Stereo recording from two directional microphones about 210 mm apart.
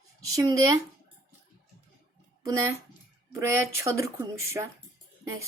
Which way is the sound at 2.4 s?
15° right (ahead or behind).